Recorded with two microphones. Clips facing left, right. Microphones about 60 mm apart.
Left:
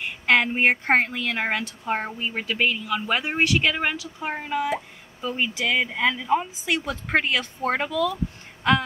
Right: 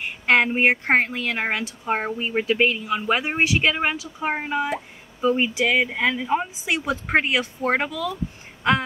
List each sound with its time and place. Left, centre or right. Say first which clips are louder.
0.3 s speech: right 2 dB; centre